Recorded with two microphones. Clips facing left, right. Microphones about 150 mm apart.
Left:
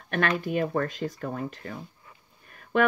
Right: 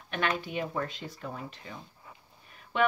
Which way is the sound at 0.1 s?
50° left (ahead or behind).